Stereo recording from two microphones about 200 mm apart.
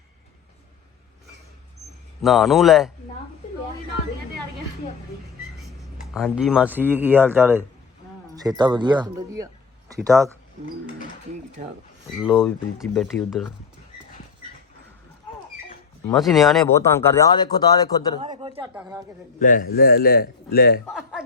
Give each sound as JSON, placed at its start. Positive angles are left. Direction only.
{"t": 2.2, "sound": "speech", "side_deg": 0}
{"t": 5.5, "sound": "speech", "side_deg": 0}
{"t": 12.2, "sound": "speech", "side_deg": 0}
{"t": 16.0, "sound": "speech", "side_deg": 0}
{"t": 16.6, "sound": "speech", "side_deg": 15}
{"t": 18.2, "sound": "speech", "side_deg": -25}
{"t": 19.4, "sound": "a man's voice", "side_deg": 40}
{"t": 20.9, "sound": "a sound", "side_deg": 0}